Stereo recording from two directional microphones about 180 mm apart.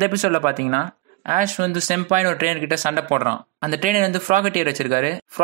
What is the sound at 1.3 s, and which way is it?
Speech, 45° right (ahead or behind).